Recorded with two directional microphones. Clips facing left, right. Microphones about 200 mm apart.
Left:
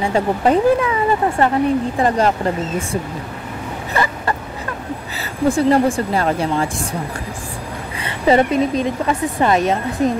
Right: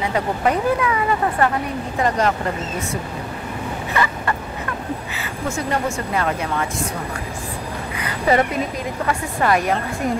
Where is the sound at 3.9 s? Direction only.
35° left (ahead or behind).